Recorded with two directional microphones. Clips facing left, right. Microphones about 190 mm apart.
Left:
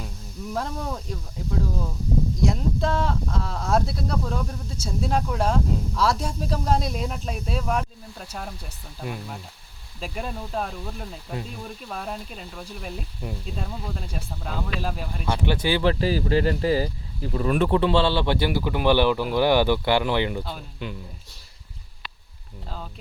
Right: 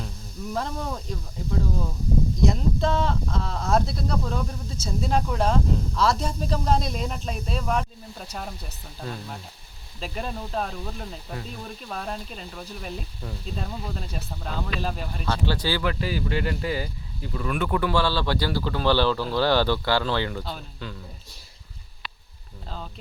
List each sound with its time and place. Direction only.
0.5 s speech: centre (ahead or behind)
9.0 s speech: 15° left (ahead or behind)
10.0 s speech: 5° left (ahead or behind)
13.2 s speech: 15° left (ahead or behind)
13.6 s speech: centre (ahead or behind)
15.3 s speech: 20° left (ahead or behind)
15.8 s speech: 35° left (ahead or behind); by 20.4 s 20° left (ahead or behind)
20.4 s speech: centre (ahead or behind)